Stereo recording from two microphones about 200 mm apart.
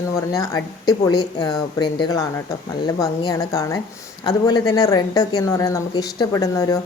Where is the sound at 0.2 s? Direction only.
15° left (ahead or behind).